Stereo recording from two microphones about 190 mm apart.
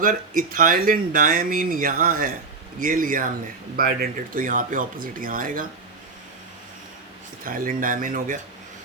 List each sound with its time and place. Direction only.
0.0 s speech: 45° right (ahead or behind)
7.4 s speech: 45° right (ahead or behind)